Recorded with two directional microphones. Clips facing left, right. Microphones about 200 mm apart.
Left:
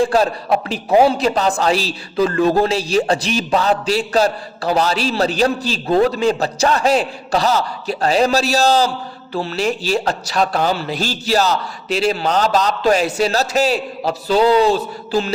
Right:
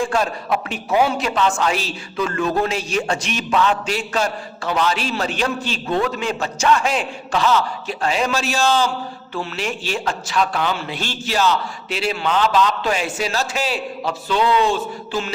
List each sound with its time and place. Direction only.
0.0 s a man's voice: 35° left (ahead or behind)